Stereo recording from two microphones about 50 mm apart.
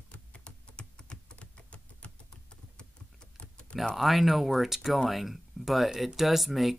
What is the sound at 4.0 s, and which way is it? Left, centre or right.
Speech, centre.